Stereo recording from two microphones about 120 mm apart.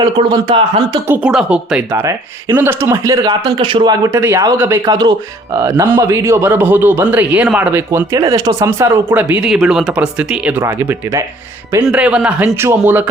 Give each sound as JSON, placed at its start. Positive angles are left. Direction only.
{"t": 0.0, "sound": "speech", "side_deg": -35}
{"t": 1.0, "sound": "speech", "side_deg": -15}
{"t": 2.6, "sound": "a man's voice", "side_deg": -20}
{"t": 3.4, "sound": "a man's voice", "side_deg": -40}
{"t": 4.0, "sound": "a man's voice", "side_deg": -20}
{"t": 4.9, "sound": "a man's voice", "side_deg": -35}
{"t": 10.6, "sound": "a man's voice", "side_deg": -20}
{"t": 11.9, "sound": "speech", "side_deg": -10}